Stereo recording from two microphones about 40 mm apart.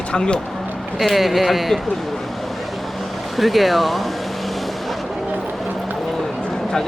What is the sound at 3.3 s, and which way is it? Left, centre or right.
Speech, centre.